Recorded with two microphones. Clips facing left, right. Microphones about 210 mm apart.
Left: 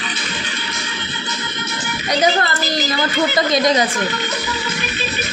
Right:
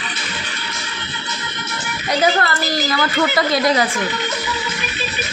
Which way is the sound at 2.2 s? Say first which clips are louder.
Even; 20° left (ahead or behind).